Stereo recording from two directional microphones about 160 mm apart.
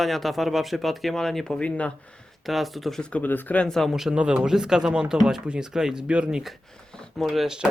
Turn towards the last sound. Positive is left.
turn(degrees=0)  # may be behind; listen again after turning